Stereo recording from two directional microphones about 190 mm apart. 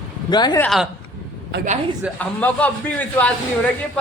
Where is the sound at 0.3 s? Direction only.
20° left (ahead or behind).